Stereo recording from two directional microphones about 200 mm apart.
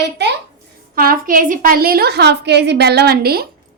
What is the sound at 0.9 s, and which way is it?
A woman's voice, 45° right (ahead or behind).